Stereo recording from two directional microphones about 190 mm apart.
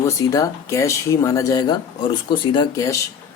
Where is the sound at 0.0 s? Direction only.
20° left (ahead or behind).